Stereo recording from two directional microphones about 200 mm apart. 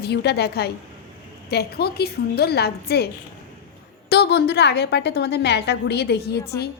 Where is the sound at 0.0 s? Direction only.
55° left (ahead or behind).